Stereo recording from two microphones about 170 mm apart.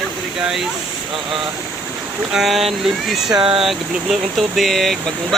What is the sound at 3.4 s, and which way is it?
Speech, 30° right (ahead or behind).